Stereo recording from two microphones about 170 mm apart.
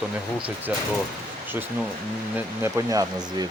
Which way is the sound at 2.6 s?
20° right (ahead or behind).